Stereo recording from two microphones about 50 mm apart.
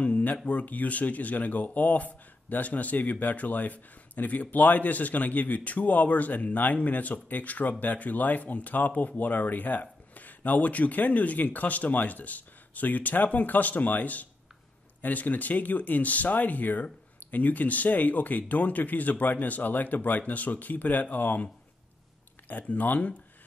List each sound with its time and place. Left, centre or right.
0.0 s a sound: left
0.5 s speech: left
22.5 s speech: left